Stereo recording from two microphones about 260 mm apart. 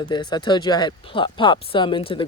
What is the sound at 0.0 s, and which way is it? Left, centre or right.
Speech, centre.